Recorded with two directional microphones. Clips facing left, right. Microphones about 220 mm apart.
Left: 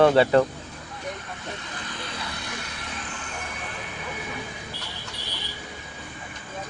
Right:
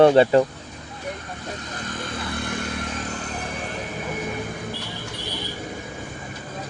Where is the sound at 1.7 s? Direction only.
45° right (ahead or behind).